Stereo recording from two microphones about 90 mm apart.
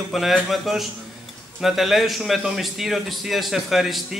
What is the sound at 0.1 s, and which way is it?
A man's voice, centre (ahead or behind).